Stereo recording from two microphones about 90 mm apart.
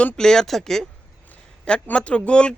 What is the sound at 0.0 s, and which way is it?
A man's voice, 10° left (ahead or behind).